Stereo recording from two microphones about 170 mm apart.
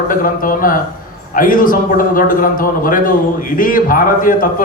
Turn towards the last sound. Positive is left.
turn(degrees=55)  # may be behind; listen again after turning